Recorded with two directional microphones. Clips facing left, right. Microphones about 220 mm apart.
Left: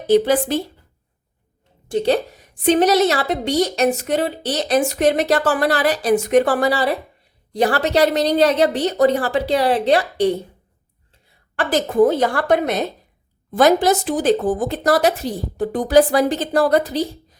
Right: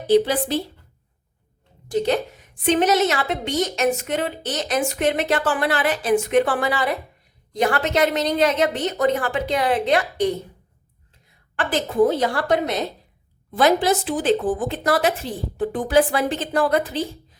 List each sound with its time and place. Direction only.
0.1 s a woman's voice: 50° left (ahead or behind)
1.9 s a woman's voice: 30° left (ahead or behind)
11.5 s a woman's voice: 40° left (ahead or behind)
13.5 s a woman's voice: 45° left (ahead or behind)